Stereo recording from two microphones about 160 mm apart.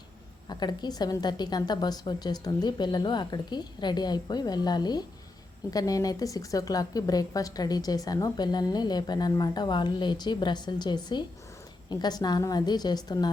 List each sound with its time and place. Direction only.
0.4 s a woman's voice: 25° left (ahead or behind)